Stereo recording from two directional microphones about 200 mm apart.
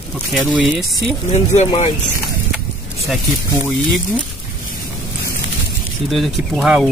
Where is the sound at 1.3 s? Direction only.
30° left (ahead or behind).